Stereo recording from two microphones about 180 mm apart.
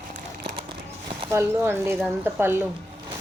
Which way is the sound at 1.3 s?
15° right (ahead or behind).